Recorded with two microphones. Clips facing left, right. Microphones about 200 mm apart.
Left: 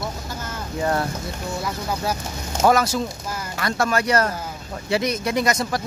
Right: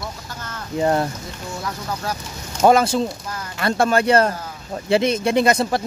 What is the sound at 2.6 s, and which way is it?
Speech, 25° right (ahead or behind).